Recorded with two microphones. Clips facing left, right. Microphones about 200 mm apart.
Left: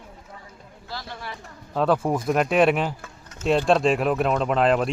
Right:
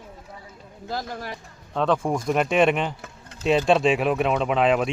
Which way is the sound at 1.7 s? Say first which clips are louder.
Left 1 dB; 5° left (ahead or behind).